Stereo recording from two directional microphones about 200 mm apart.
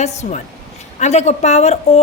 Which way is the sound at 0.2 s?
35° left (ahead or behind).